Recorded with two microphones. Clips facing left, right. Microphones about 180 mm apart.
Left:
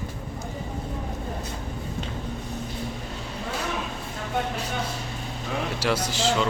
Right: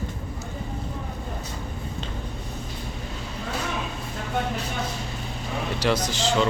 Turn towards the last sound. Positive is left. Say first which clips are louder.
# right 1 dB
turn(degrees=5)  # may be behind; listen again after turning